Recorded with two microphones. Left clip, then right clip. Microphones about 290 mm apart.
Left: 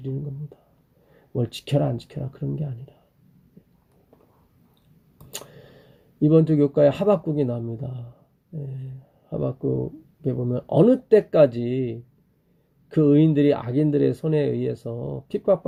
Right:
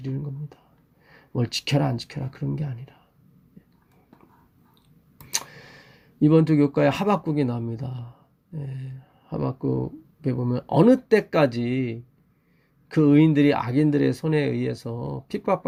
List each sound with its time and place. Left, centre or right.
1.3 s speech: right
5.5 s speech: right